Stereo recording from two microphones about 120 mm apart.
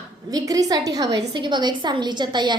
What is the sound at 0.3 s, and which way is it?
A woman's voice, 30° right (ahead or behind).